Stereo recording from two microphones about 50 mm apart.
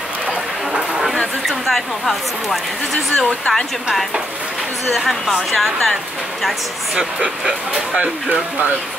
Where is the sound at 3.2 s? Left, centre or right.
Centre.